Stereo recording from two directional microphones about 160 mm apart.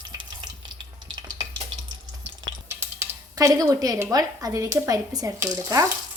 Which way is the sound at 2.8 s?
20° right (ahead or behind).